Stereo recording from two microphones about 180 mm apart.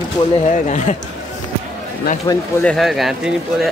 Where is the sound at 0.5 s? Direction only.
45° left (ahead or behind).